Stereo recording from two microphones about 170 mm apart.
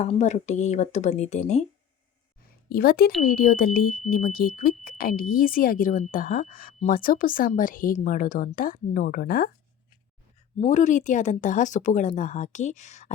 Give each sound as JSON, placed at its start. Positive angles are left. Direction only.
{"t": 0.0, "sound": "speech", "side_deg": 40}
{"t": 2.6, "sound": "speech", "side_deg": 60}
{"t": 10.6, "sound": "speech", "side_deg": 45}